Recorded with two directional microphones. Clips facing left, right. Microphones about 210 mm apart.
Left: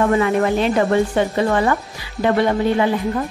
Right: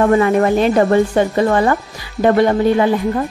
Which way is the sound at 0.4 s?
45° right (ahead or behind).